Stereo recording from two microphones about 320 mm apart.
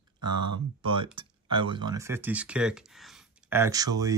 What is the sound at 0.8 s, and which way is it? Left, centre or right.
Speech, centre.